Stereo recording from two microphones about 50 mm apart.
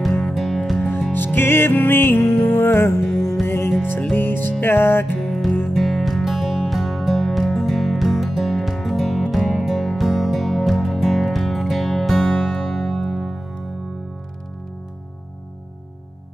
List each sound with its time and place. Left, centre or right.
0.2 s music: centre
1.1 s music: left
2.4 s music: left
3.0 s music: centre
3.4 s music: left
4.2 s music: left
5.2 s music: centre
13.1 s music: centre